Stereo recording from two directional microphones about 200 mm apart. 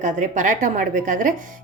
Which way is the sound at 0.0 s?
40° right (ahead or behind).